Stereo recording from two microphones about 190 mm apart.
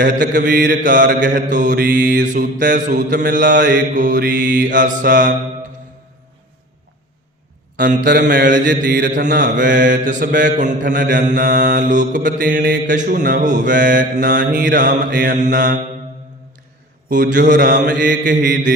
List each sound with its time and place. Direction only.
0.0 s mantra: 45° right (ahead or behind)
7.8 s mantra: 45° right (ahead or behind)
17.1 s mantra: 45° right (ahead or behind)